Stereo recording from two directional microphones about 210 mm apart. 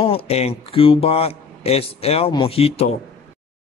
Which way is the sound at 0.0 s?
25° left (ahead or behind).